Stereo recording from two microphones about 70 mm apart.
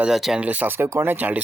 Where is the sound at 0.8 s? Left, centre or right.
Right.